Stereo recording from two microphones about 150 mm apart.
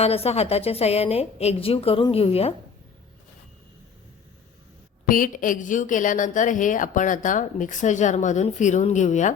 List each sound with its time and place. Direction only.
0.0 s a woman's voice: 40° left (ahead or behind)
5.0 s a woman's voice: 65° left (ahead or behind)